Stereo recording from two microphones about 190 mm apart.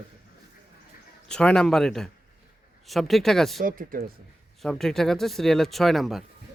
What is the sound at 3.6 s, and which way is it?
Speech, 45° right (ahead or behind).